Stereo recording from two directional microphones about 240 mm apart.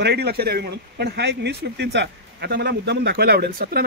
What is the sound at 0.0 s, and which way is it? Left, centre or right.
Speech, right.